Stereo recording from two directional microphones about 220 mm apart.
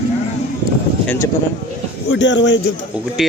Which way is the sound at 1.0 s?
10° left (ahead or behind).